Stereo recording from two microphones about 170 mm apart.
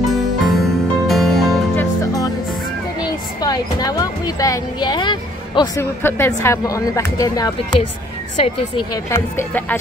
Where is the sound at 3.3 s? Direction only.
20° left (ahead or behind).